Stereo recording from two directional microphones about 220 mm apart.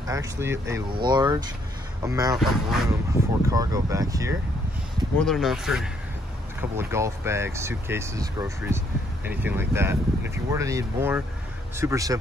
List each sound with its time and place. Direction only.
0.1 s speech: 10° right (ahead or behind)
2.3 s speech: centre (ahead or behind)
3.4 s speech: 15° right (ahead or behind)
5.2 s speech: centre (ahead or behind)